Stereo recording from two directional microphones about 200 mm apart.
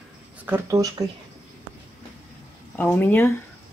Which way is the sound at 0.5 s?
15° right (ahead or behind).